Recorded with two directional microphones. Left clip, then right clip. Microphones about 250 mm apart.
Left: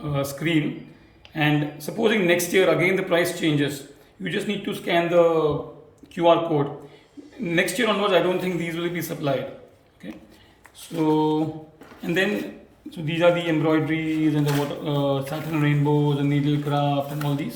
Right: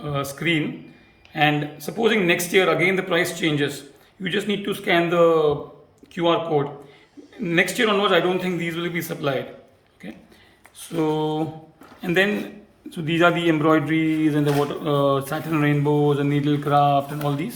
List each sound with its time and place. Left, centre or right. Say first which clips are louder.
0.0 s speech: right 1 dB; centre